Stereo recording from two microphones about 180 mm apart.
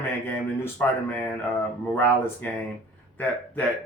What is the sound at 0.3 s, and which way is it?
Speech, 10° left (ahead or behind).